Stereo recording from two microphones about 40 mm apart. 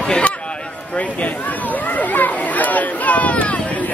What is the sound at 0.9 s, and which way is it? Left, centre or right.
Chatter, left.